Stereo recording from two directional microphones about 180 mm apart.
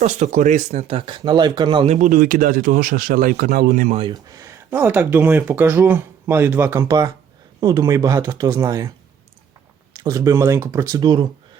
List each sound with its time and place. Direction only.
0.0 s speech: 40° right (ahead or behind)
2.0 s speech: 50° right (ahead or behind)
3.9 s speech: 25° right (ahead or behind)
9.9 s speech: 20° right (ahead or behind)